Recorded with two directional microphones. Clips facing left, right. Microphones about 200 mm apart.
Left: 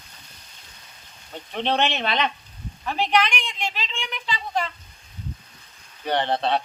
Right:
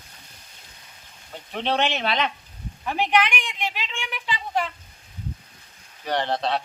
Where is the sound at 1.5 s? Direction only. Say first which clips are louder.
Left 1 dB; 5° right (ahead or behind).